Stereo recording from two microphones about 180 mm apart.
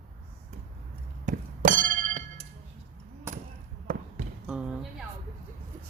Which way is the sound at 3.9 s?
50° right (ahead or behind).